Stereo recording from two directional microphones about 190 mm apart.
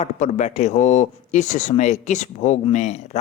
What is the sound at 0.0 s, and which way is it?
Speech, 40° left (ahead or behind).